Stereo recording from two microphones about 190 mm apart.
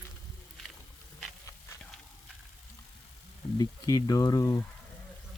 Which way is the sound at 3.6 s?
20° left (ahead or behind).